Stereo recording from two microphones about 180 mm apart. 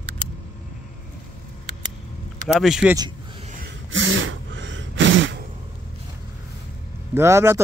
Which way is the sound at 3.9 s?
90° right.